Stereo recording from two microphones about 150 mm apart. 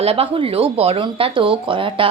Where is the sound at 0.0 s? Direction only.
40° right (ahead or behind).